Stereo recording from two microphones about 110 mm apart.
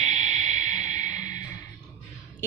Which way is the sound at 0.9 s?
35° left (ahead or behind).